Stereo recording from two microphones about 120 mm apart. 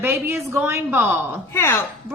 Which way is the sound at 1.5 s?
20° left (ahead or behind).